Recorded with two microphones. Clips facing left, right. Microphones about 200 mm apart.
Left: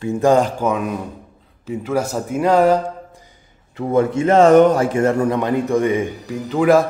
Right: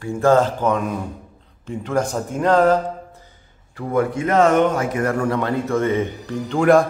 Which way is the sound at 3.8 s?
25° left (ahead or behind).